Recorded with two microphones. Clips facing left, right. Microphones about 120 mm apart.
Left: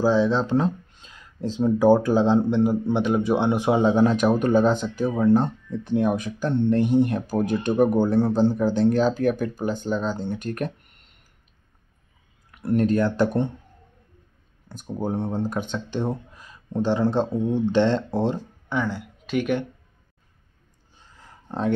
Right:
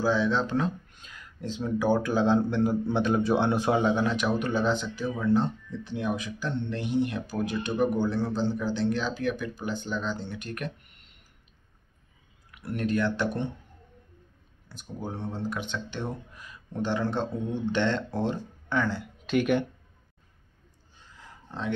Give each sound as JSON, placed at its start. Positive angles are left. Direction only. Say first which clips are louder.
{"t": 0.0, "sound": "speech", "louder": "left 5 dB", "side_deg": 35}
{"t": 3.8, "sound": "speech", "louder": "left 7 dB", "side_deg": 40}
{"t": 12.4, "sound": "speech", "louder": "left 9 dB", "side_deg": 40}
{"t": 14.7, "sound": "speech", "louder": "left 9 dB", "side_deg": 45}
{"t": 18.7, "sound": "speech", "louder": "left 2 dB", "side_deg": 15}
{"t": 19.3, "sound": "speech", "louder": "left 1 dB", "side_deg": 0}
{"t": 21.5, "sound": "speech", "louder": "left 8 dB", "side_deg": 45}